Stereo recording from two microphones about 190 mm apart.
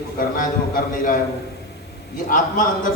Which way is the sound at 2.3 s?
45° left (ahead or behind).